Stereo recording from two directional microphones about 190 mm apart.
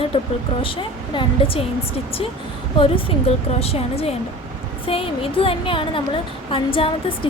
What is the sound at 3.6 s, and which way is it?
A woman's voice, 30° left (ahead or behind).